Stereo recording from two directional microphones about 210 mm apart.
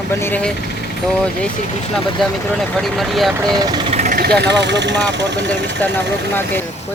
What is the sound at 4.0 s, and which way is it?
Speech, 40° right (ahead or behind).